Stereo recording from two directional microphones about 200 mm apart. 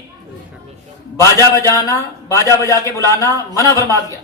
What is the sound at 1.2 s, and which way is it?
Speech, 15° left (ahead or behind).